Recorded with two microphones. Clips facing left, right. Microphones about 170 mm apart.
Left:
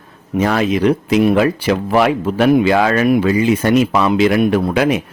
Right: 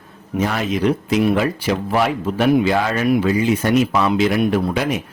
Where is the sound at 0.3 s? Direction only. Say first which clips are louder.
Left 5 dB; 85° left.